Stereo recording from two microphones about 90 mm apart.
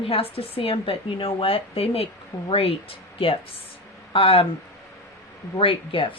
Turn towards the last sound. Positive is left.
turn(degrees=75)  # may be behind; listen again after turning